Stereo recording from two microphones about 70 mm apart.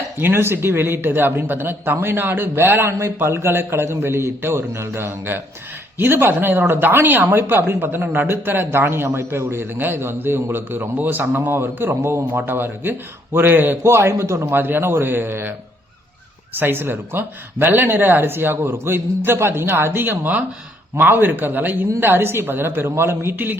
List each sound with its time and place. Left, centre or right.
0.2 s speech: right
14.5 s speech: right
16.6 s a man's voice: right